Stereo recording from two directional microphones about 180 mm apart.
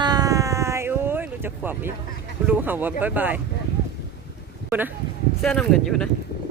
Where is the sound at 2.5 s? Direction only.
10° right (ahead or behind).